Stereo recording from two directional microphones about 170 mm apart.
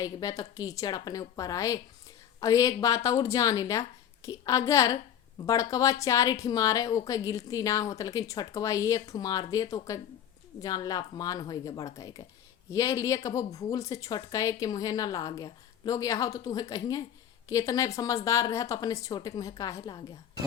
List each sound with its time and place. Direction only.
0.0 s a woman's voice: 20° left (ahead or behind)